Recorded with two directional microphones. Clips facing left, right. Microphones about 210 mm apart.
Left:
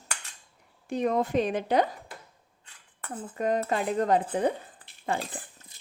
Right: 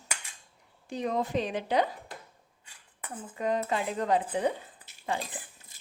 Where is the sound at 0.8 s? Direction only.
55° left (ahead or behind).